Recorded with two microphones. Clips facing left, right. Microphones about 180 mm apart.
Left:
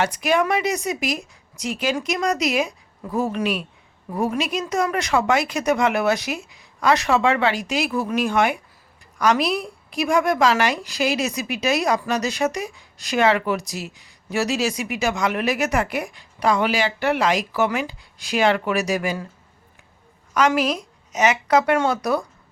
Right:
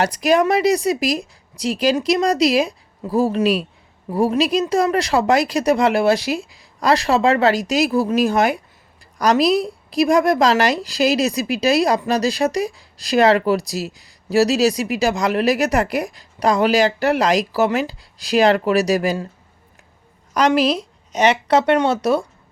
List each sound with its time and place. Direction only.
0.0 s a woman's voice: 40° right (ahead or behind)
20.3 s a woman's voice: 35° right (ahead or behind)